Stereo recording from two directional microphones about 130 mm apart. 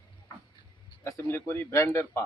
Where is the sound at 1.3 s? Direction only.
15° left (ahead or behind).